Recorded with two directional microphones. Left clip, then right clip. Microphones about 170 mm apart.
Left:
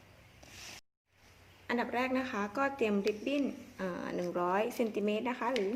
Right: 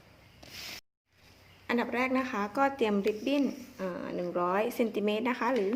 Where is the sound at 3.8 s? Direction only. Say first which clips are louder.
Right 2 dB; 5° left (ahead or behind).